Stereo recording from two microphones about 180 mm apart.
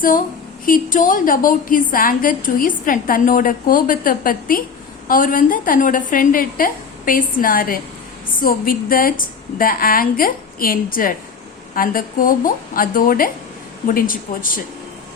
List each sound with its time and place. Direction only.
0.6 s a woman's voice: 50° left (ahead or behind)